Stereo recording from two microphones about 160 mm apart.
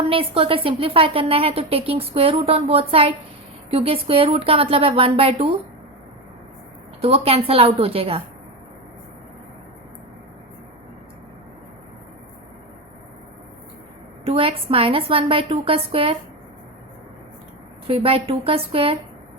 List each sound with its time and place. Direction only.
0.1 s a woman's voice: 35° right (ahead or behind)
7.0 s a woman's voice: 40° right (ahead or behind)
14.3 s a woman's voice: 35° right (ahead or behind)
17.8 s a woman's voice: 35° right (ahead or behind)